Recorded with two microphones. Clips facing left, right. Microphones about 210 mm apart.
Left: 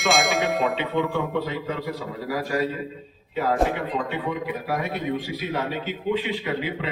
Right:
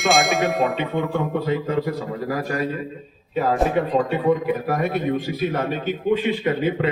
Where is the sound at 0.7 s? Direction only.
50° right (ahead or behind).